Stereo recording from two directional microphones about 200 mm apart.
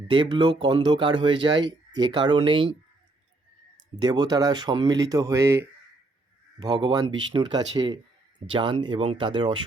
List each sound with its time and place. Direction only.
0.1 s speech: 25° right (ahead or behind)
3.9 s speech: 20° right (ahead or behind)